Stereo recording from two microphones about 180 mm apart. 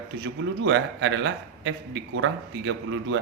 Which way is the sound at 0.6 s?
90° right.